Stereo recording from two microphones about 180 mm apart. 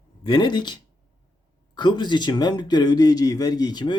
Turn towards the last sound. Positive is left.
turn(degrees=20)  # may be behind; listen again after turning